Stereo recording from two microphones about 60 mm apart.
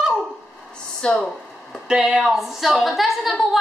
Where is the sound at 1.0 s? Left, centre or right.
Centre.